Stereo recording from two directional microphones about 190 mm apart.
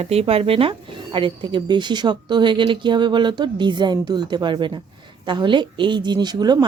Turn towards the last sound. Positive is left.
turn(degrees=-20)  # may be behind; listen again after turning